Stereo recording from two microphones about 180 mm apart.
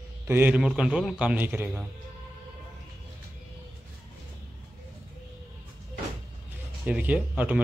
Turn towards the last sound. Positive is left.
turn(degrees=-5)  # may be behind; listen again after turning